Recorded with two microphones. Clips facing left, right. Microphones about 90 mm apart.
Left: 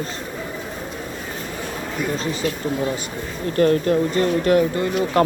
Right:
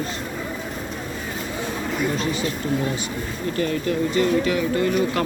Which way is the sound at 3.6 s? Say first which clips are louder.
Left 7 dB; 45° left (ahead or behind).